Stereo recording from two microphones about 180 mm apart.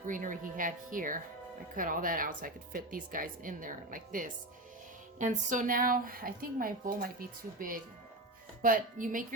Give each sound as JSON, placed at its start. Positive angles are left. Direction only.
{"t": 0.1, "sound": "a woman's voice", "side_deg": -45}